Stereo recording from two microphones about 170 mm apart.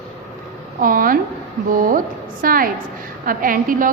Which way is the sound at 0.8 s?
55° right (ahead or behind).